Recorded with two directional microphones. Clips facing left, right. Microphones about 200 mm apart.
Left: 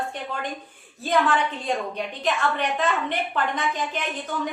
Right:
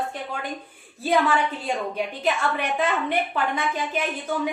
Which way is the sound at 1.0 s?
5° right (ahead or behind).